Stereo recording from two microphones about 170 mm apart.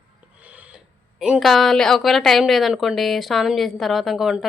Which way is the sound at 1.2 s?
Centre (ahead or behind).